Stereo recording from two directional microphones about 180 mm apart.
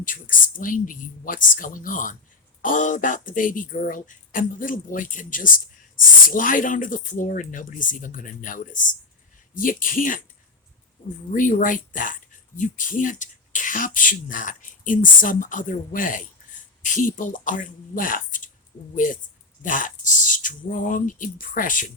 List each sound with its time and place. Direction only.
0.0 s speech: 50° left (ahead or behind)
11.3 s speech: 45° left (ahead or behind)